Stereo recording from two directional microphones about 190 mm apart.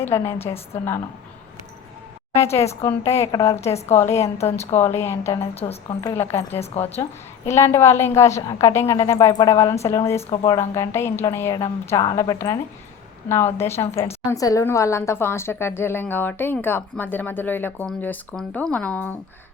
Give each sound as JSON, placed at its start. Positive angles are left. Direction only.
{"t": 0.0, "sound": "a woman's voice", "side_deg": 10}
{"t": 2.3, "sound": "a woman's voice", "side_deg": 15}
{"t": 3.7, "sound": "speech", "side_deg": 35}
{"t": 4.0, "sound": "a woman's voice", "side_deg": 15}
{"t": 4.5, "sound": "speech", "side_deg": 35}
{"t": 4.8, "sound": "a woman's voice", "side_deg": 15}
{"t": 5.4, "sound": "speech", "side_deg": 30}
{"t": 6.0, "sound": "a woman's voice", "side_deg": 15}
{"t": 6.5, "sound": "speech", "side_deg": 30}
{"t": 7.4, "sound": "a woman's voice", "side_deg": 15}